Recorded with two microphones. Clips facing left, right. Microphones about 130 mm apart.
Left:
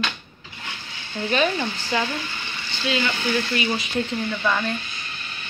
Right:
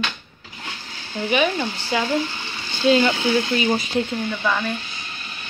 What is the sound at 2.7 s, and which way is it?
Speech, 35° right (ahead or behind).